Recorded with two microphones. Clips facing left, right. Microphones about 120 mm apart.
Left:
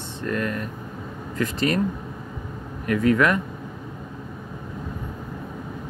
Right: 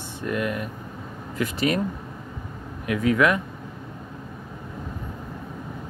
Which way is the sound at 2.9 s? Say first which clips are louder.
Left 1 dB; 5° right (ahead or behind).